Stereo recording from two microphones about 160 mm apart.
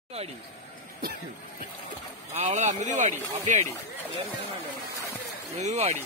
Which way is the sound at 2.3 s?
45° right (ahead or behind).